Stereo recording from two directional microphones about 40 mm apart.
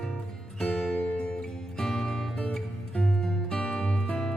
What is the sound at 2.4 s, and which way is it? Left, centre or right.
Music, left.